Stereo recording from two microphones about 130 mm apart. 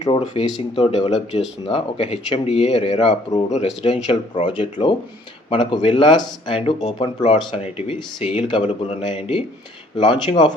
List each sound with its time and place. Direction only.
0.0 s speech: 40° left (ahead or behind)
7.5 s speech: 50° left (ahead or behind)